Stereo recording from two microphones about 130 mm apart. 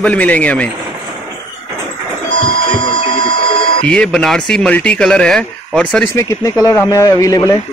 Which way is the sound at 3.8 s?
5° left (ahead or behind).